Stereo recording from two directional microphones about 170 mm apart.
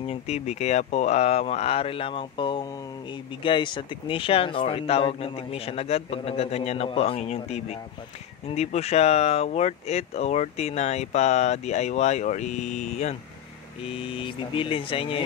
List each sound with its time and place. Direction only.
0.0 s speech: 40° left (ahead or behind)